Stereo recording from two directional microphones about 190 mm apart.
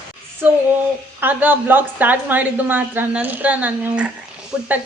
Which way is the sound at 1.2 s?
10° right (ahead or behind).